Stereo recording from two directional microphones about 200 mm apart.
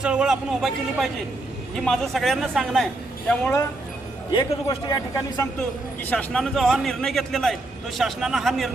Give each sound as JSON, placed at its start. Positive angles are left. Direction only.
{"t": 0.0, "sound": "a man's voice", "side_deg": -5}
{"t": 4.4, "sound": "a man's voice", "side_deg": 25}
{"t": 6.1, "sound": "a man's voice", "side_deg": 5}